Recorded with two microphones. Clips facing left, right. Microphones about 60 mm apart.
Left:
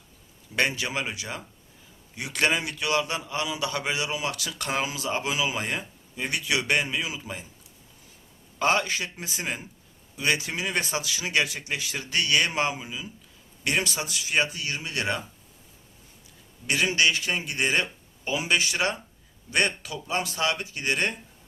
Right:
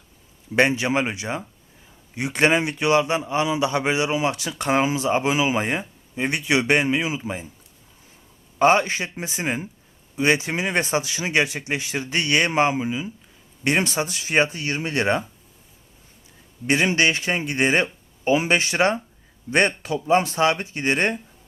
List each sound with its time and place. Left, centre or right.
0.5 s a man's voice: right
8.5 s a man's voice: right
16.6 s speech: right